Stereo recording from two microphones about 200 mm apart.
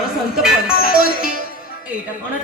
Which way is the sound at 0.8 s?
45° left (ahead or behind).